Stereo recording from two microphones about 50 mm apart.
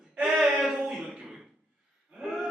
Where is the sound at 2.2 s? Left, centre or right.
Centre.